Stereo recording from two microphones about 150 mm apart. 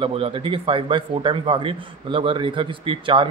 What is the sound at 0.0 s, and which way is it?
Speech, 35° right (ahead or behind).